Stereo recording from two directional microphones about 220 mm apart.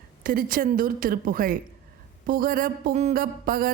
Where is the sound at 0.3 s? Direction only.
40° right (ahead or behind).